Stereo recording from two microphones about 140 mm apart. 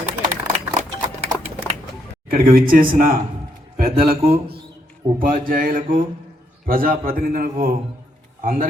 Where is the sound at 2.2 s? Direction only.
90° right.